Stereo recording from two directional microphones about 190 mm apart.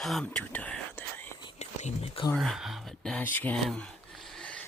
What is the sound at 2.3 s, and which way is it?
Speech, centre (ahead or behind).